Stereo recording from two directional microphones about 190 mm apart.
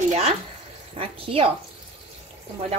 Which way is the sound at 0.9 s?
30° right (ahead or behind).